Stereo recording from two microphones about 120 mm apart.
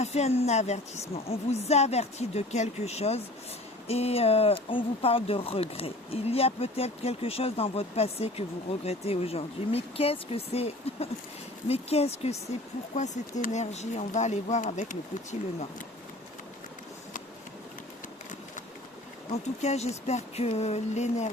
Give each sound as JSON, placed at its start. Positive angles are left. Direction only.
{"t": 0.0, "sound": "speech", "side_deg": 60}
{"t": 1.1, "sound": "speech", "side_deg": 55}
{"t": 13.2, "sound": "speech", "side_deg": 75}
{"t": 19.3, "sound": "speech", "side_deg": 65}